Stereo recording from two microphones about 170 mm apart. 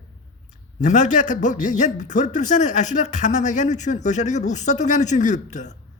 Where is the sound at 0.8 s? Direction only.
45° left (ahead or behind).